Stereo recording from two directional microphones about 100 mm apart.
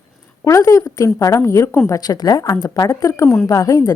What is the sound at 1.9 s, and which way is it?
A woman's voice, 40° left (ahead or behind).